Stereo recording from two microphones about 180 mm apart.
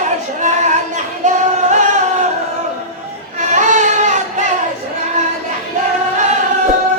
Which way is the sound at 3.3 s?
40° right (ahead or behind).